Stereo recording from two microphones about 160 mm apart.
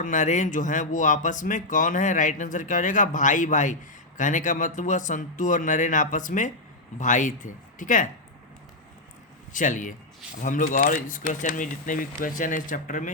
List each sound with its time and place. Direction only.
0.0 s speech: 50° left (ahead or behind)
9.5 s speech: 55° left (ahead or behind)